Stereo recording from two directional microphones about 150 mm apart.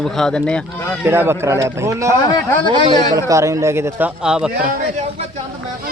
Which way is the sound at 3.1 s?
20° right (ahead or behind).